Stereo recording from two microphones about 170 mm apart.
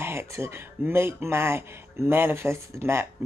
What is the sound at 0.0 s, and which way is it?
Speech, 15° right (ahead or behind).